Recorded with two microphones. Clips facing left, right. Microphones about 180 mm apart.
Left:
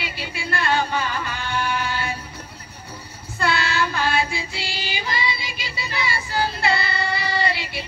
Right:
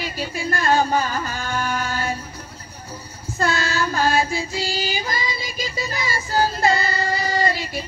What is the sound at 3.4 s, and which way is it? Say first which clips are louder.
Child singing: even; 40° right (ahead or behind).